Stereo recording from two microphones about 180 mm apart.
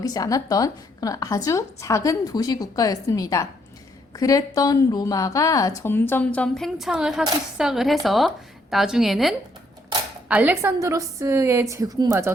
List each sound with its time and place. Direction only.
0.0 s a woman's voice: 20° left (ahead or behind); by 12.3 s 20° right (ahead or behind)